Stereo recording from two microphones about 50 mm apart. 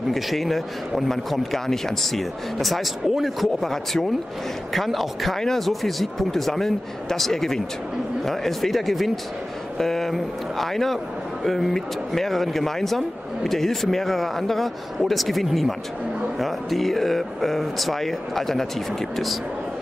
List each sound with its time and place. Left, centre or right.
0.1 s speech: centre